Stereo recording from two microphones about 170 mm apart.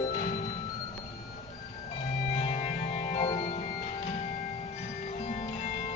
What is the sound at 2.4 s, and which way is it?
Music, 40° left (ahead or behind).